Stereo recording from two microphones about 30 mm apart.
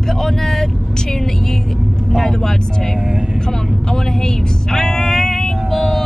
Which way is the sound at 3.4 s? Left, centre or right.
Centre.